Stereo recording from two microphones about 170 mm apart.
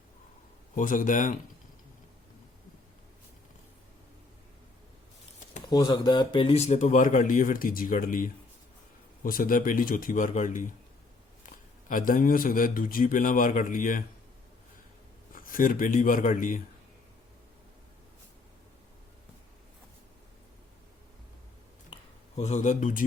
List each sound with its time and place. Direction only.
0.8 s speech: 50° left (ahead or behind)
5.7 s speech: 25° left (ahead or behind); by 14.0 s 55° left (ahead or behind)
15.3 s speech: 55° left (ahead or behind)
22.4 s speech: 40° left (ahead or behind)